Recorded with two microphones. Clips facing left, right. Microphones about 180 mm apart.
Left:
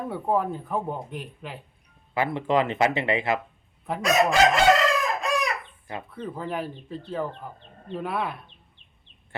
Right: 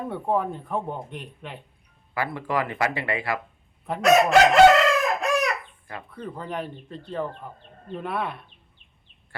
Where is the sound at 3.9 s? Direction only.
Centre (ahead or behind).